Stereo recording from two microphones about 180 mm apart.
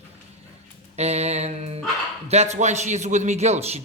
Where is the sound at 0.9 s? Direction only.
35° right (ahead or behind).